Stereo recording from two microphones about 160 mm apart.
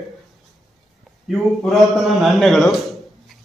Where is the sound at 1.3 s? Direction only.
Centre (ahead or behind).